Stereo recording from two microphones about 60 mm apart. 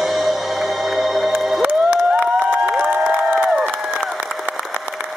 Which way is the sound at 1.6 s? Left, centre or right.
Right.